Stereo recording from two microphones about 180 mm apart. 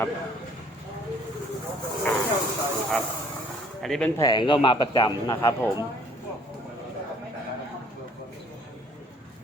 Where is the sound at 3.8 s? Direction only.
Centre (ahead or behind).